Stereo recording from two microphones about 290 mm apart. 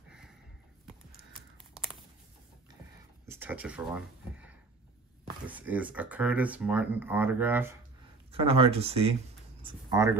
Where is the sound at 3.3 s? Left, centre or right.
Centre.